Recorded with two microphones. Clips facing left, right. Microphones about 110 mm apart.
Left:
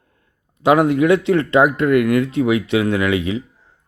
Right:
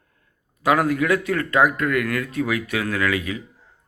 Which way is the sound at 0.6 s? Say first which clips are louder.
Left 6 dB; 25° left (ahead or behind).